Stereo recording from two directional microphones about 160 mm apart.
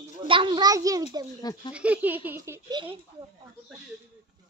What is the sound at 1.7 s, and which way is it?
Speech, 10° right (ahead or behind).